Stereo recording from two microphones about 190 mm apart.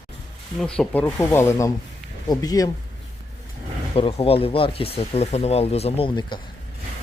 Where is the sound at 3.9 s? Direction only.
30° left (ahead or behind).